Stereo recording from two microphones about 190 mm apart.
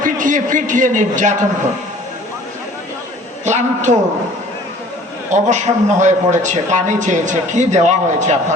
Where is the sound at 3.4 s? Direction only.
40° right (ahead or behind).